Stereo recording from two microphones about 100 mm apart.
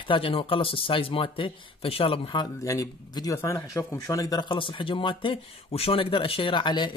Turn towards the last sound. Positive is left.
turn(degrees=50)  # may be behind; listen again after turning